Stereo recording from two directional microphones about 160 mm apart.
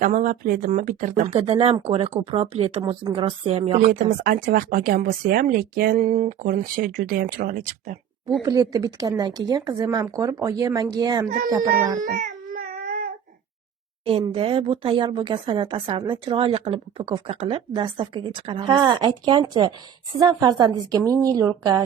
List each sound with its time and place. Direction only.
0.0 s speech: 55° right (ahead or behind); by 2.8 s 40° right (ahead or behind)
2.8 s speech: 25° right (ahead or behind); by 7.9 s 60° right (ahead or behind)
8.4 s speech: 25° right (ahead or behind)
11.9 s a sound: 55° right (ahead or behind); by 13.1 s 75° right (ahead or behind)
14.0 s speech: 35° right (ahead or behind)